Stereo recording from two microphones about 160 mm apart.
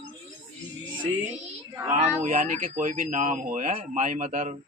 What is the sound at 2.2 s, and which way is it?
Speech, 55° right (ahead or behind).